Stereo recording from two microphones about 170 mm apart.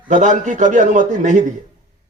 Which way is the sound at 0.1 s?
45° right (ahead or behind).